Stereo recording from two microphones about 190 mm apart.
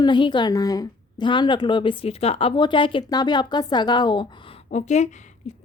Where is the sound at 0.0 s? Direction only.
25° left (ahead or behind).